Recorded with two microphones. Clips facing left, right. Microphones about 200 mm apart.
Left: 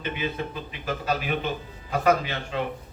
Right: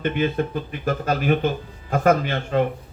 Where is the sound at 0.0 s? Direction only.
50° right (ahead or behind).